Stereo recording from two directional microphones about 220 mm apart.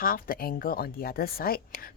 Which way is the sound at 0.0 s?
40° left (ahead or behind).